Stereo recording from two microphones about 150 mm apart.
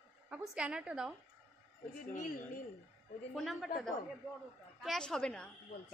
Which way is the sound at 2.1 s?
65° left (ahead or behind).